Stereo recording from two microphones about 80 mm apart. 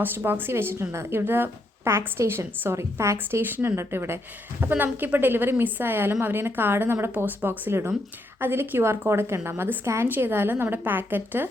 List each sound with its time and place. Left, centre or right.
0.0 s a woman's voice: right